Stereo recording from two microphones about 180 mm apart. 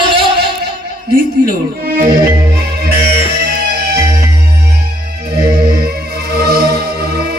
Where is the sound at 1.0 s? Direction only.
55° right (ahead or behind).